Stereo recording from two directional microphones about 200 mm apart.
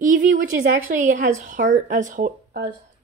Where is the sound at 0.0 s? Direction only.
40° right (ahead or behind).